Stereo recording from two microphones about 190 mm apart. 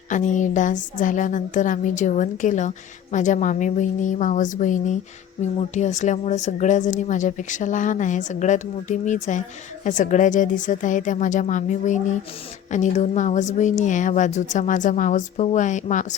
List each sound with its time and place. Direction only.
0.1 s speech: 40° left (ahead or behind)